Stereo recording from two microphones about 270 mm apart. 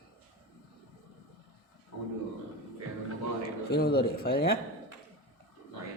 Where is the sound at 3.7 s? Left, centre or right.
Left.